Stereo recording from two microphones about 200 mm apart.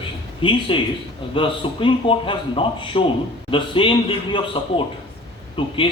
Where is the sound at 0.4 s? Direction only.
25° left (ahead or behind).